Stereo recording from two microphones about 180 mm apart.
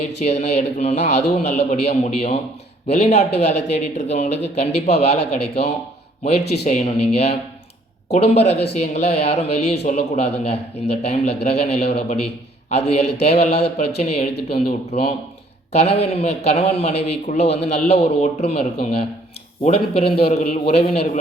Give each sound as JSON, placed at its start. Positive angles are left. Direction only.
{"t": 0.2, "sound": "a man's voice", "side_deg": 40}